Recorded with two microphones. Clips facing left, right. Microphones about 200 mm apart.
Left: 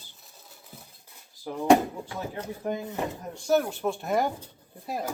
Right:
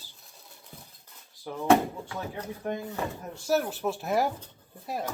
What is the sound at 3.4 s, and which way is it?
Speech, 5° right (ahead or behind).